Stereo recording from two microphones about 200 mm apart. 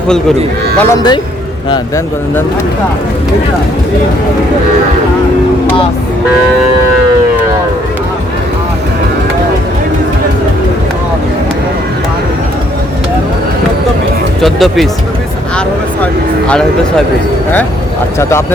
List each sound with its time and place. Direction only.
0.8 s speech: 15° left (ahead or behind)
14.4 s speech: centre (ahead or behind)
18.2 s speech: 15° left (ahead or behind)